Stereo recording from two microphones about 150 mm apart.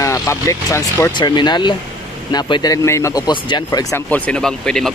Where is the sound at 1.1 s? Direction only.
30° left (ahead or behind).